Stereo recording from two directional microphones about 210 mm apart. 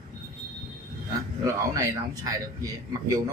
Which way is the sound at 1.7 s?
15° right (ahead or behind).